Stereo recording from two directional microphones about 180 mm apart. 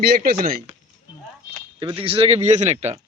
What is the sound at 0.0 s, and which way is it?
Speech, 60° right (ahead or behind).